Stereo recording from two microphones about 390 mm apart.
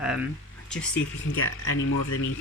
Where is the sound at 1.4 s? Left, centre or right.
Left.